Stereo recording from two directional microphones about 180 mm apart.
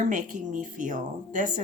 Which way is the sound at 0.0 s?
45° right (ahead or behind).